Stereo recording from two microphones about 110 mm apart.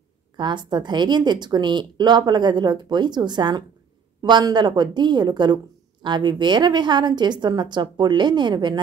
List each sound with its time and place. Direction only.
0.4 s speech: 45° right (ahead or behind)